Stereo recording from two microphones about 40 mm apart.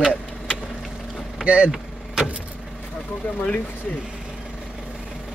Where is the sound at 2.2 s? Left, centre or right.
Right.